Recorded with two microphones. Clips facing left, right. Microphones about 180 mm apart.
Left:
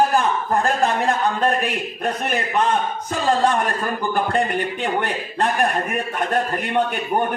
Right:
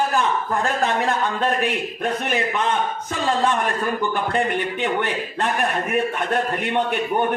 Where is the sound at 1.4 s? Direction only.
40° left (ahead or behind).